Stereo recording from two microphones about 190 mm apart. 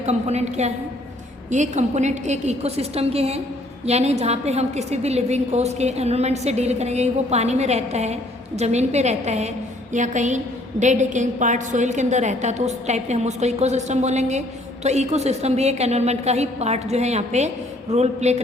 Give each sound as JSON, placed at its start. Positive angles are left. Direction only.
{"t": 0.0, "sound": "a woman's voice", "side_deg": -35}